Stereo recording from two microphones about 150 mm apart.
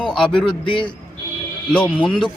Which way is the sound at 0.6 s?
35° left (ahead or behind).